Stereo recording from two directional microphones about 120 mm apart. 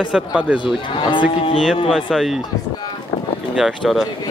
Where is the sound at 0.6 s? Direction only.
40° left (ahead or behind).